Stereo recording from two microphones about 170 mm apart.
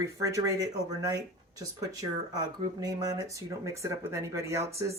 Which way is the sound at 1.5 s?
20° right (ahead or behind).